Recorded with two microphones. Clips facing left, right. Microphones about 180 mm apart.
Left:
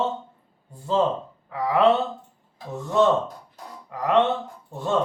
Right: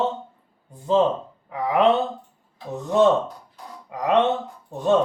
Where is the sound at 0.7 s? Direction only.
20° right (ahead or behind).